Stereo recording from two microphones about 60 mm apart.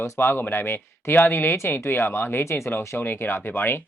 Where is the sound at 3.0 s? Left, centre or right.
Left.